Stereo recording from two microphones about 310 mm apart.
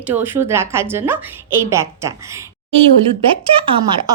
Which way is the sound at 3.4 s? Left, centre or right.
Centre.